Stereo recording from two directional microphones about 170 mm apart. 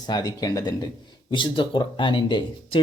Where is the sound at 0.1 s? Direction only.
20° left (ahead or behind).